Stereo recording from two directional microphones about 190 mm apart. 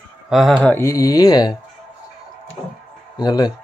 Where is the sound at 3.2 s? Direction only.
20° left (ahead or behind).